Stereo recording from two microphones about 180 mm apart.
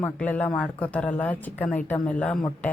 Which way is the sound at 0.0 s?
10° left (ahead or behind).